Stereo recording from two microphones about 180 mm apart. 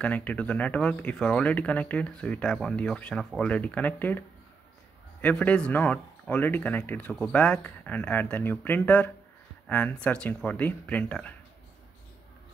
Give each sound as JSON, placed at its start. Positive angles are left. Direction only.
{"t": 0.0, "sound": "speech", "side_deg": 10}
{"t": 5.2, "sound": "speech", "side_deg": 10}